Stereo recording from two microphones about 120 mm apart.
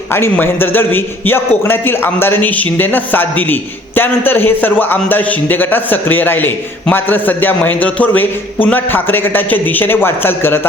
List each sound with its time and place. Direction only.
0.1 s a man's voice: 20° left (ahead or behind)